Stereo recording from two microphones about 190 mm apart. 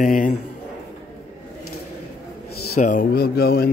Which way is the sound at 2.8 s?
45° left (ahead or behind).